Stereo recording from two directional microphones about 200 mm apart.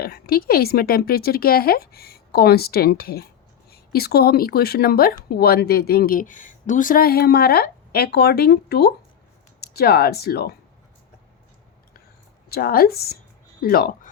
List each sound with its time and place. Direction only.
0.0 s speech: 50° left (ahead or behind)
12.5 s speech: 50° left (ahead or behind)